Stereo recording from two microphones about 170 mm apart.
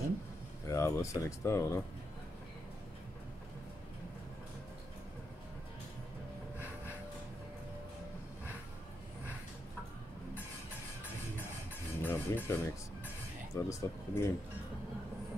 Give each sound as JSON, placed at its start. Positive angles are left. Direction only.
{"t": 0.7, "sound": "speech", "side_deg": 15}
{"t": 11.3, "sound": "music", "side_deg": 10}
{"t": 13.6, "sound": "speech", "side_deg": 20}